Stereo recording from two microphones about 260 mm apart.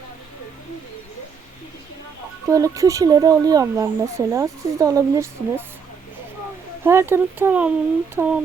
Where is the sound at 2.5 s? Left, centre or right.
Centre.